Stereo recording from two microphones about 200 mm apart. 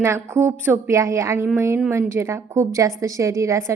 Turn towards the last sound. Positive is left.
turn(degrees=-15)  # may be behind; listen again after turning